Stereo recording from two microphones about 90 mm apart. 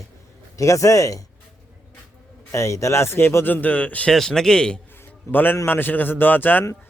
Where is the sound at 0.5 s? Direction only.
35° left (ahead or behind).